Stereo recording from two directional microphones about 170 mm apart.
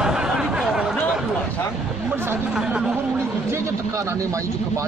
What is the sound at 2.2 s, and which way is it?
Speech, 10° right (ahead or behind).